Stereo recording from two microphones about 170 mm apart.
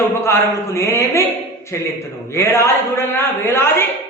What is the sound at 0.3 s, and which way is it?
A man's voice, 15° left (ahead or behind).